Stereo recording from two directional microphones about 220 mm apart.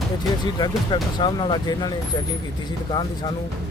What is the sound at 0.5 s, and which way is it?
Speech, 20° left (ahead or behind).